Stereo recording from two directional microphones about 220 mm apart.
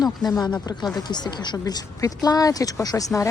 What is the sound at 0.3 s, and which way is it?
Speech, 20° left (ahead or behind).